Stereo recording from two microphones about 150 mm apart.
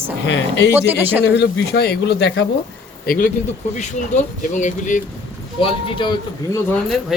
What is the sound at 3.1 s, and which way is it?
Speech, 65° left (ahead or behind).